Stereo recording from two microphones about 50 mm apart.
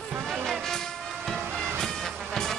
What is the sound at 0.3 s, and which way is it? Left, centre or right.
Music, centre.